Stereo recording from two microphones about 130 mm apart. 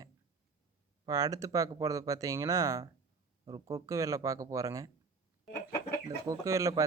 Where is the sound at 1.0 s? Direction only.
30° right (ahead or behind).